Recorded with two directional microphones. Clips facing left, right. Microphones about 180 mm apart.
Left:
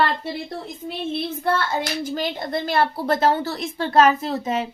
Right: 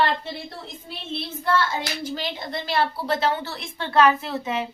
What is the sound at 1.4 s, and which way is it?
A child's voice, 55° left (ahead or behind).